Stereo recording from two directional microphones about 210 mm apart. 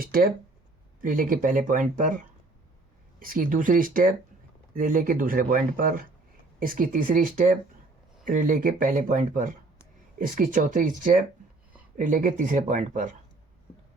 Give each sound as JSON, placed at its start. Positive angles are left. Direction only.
{"t": 0.0, "sound": "speech", "side_deg": -45}